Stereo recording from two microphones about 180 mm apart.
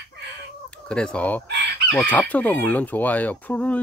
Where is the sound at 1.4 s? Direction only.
70° right (ahead or behind).